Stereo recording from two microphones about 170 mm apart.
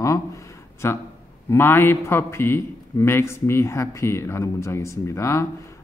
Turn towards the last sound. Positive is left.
turn(degrees=15)  # may be behind; listen again after turning